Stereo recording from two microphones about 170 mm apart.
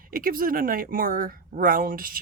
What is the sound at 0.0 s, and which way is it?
Speech, 55° right (ahead or behind).